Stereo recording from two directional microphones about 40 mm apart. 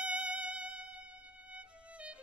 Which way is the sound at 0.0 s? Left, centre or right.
Right.